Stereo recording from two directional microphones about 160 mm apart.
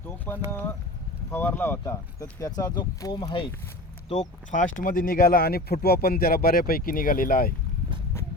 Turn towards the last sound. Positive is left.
turn(degrees=65)  # may be behind; listen again after turning